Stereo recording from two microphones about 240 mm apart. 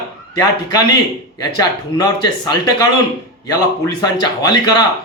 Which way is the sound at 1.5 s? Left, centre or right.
Centre.